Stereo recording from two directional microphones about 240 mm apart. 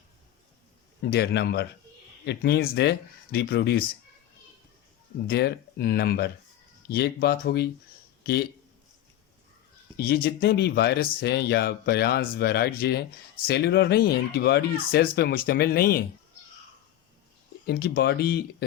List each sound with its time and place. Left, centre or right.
1.0 s speech: left
5.3 s speech: left
10.0 s speech: left
17.7 s speech: left